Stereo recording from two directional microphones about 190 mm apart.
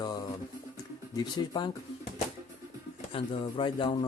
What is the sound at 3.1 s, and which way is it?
Speech, 30° left (ahead or behind).